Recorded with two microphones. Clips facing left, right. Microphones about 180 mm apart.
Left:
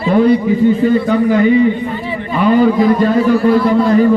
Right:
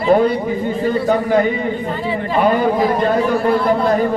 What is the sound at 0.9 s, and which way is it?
A man's voice, 40° right (ahead or behind).